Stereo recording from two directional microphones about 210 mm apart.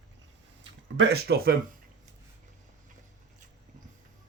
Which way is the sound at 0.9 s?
50° right (ahead or behind).